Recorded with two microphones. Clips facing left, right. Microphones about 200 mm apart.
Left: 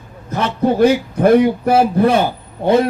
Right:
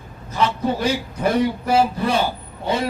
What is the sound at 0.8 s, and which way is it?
A man's voice, 55° left (ahead or behind).